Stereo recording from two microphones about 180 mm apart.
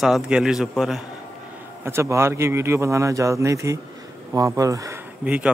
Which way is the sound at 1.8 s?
15° right (ahead or behind).